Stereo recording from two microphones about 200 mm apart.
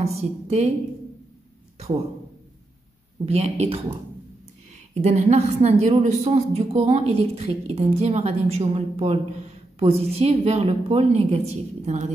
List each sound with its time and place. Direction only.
0.0 s speech: 30° right (ahead or behind)
3.3 s speech: 30° right (ahead or behind)
4.9 s speech: 35° right (ahead or behind)